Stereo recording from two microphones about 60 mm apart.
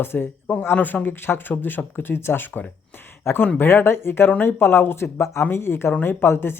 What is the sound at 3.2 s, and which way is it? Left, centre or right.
Speech, left.